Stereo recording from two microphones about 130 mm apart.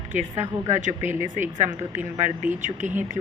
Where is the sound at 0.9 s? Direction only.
20° right (ahead or behind).